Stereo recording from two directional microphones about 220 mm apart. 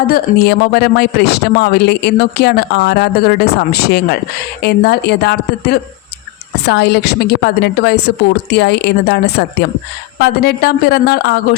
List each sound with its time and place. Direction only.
0.1 s speech: 45° left (ahead or behind)